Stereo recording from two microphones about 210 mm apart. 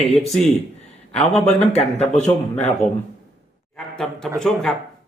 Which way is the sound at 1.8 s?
Centre (ahead or behind).